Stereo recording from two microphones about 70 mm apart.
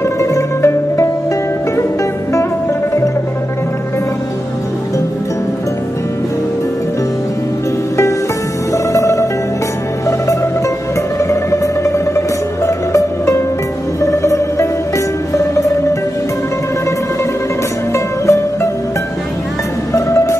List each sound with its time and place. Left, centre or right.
0.0 s music: left
8.7 s music: left
17.9 s music: left
19.9 s music: left